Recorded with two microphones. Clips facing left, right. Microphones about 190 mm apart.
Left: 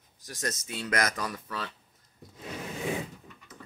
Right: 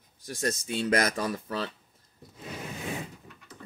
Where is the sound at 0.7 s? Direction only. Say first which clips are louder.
Right 4 dB; 30° right (ahead or behind).